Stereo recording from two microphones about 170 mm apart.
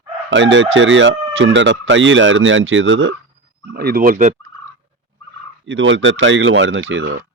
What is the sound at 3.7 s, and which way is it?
Speech, 65° right (ahead or behind).